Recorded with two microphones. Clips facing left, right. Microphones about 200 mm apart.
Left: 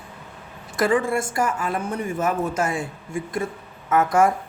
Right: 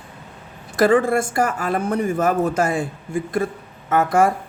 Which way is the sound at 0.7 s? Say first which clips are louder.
Right 5 dB; 40° right (ahead or behind).